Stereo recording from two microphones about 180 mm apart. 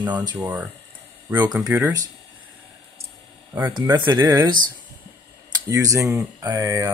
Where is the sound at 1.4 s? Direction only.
20° right (ahead or behind).